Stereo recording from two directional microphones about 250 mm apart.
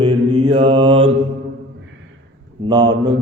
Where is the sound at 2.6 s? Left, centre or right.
Centre.